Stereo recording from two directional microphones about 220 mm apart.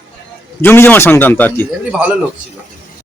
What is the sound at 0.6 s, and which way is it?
Speech, 10° left (ahead or behind).